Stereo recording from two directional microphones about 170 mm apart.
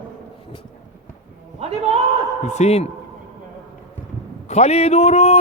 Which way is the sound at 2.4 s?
40° left (ahead or behind).